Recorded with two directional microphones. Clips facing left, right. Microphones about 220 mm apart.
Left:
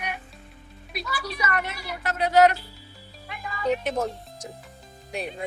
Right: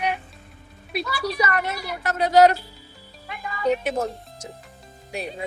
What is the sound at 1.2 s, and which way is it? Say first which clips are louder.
A woman's voice: right 5 dB; 35° right (ahead or behind).